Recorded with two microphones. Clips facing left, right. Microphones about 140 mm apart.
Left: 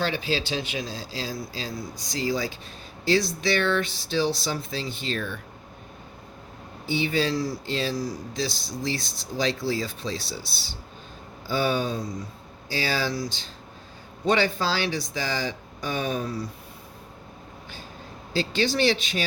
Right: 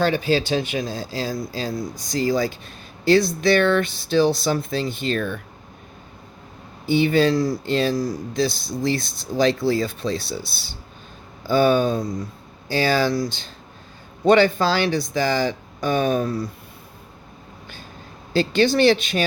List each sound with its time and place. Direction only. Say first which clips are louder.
0.0 s speech: right 7 dB; 50° right (ahead or behind)
6.8 s speech: right 8 dB; 55° right (ahead or behind)
18.3 s speech: right 7 dB; 55° right (ahead or behind)